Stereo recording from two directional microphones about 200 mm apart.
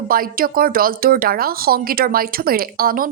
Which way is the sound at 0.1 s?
45° right (ahead or behind).